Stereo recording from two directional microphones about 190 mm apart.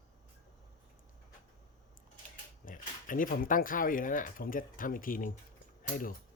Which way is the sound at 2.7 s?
45° left (ahead or behind).